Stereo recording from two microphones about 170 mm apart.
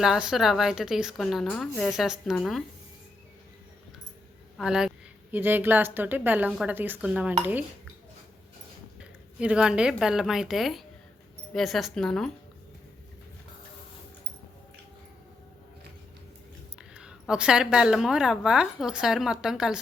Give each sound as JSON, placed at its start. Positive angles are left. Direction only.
{"t": 0.0, "sound": "a woman's voice", "side_deg": -5}
{"t": 4.5, "sound": "a woman's voice", "side_deg": -5}
{"t": 9.4, "sound": "a woman's voice", "side_deg": -5}
{"t": 16.9, "sound": "a woman's voice", "side_deg": -5}